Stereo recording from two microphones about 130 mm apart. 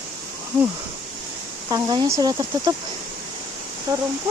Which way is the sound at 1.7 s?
30° right (ahead or behind).